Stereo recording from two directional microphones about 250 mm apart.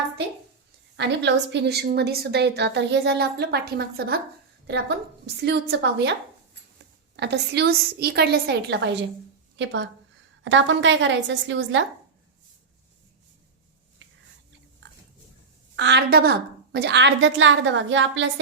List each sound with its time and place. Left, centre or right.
0.9 s a woman's voice: right
7.2 s a woman's voice: right
15.7 s a woman's voice: right